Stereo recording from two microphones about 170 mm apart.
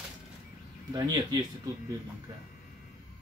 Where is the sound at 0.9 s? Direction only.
25° right (ahead or behind).